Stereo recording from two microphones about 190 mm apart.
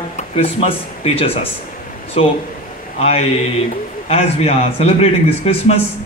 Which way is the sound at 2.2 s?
30° left (ahead or behind).